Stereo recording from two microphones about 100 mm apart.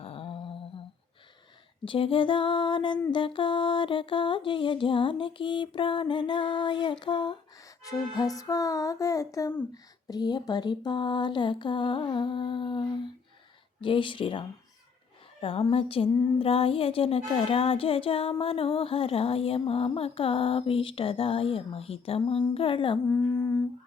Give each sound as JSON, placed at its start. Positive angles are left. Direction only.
{"t": 0.0, "sound": "humming", "side_deg": 70}
{"t": 1.8, "sound": "mantra", "side_deg": 60}
{"t": 7.9, "sound": "music", "side_deg": 40}
{"t": 9.7, "sound": "speech", "side_deg": 45}
{"t": 13.8, "sound": "mantra", "side_deg": 55}
{"t": 15.4, "sound": "a woman's voice", "side_deg": 65}
{"t": 15.7, "sound": "music", "side_deg": 65}
{"t": 22.5, "sound": "mantra", "side_deg": 65}
{"t": 23.0, "sound": "a sound", "side_deg": 30}